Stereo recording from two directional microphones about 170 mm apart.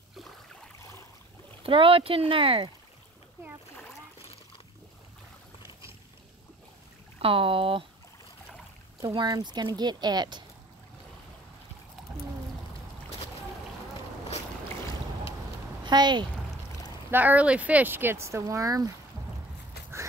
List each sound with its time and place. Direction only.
1.6 s speech: 30° right (ahead or behind)
7.2 s speech: 30° right (ahead or behind)
9.0 s speech: 25° right (ahead or behind)
15.8 s speech: 25° right (ahead or behind)
17.1 s speech: 10° right (ahead or behind)